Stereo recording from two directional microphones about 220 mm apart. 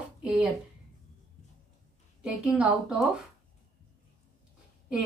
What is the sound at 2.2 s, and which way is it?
Speech, 5° right (ahead or behind).